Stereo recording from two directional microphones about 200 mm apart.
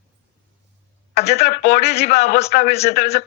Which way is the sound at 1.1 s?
35° left (ahead or behind).